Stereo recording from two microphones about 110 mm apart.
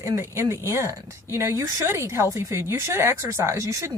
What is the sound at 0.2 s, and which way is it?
Speech, 25° right (ahead or behind).